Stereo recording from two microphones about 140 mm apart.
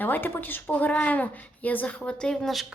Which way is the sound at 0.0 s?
15° left (ahead or behind).